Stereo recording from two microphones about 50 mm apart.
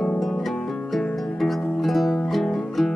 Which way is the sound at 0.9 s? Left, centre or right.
Centre.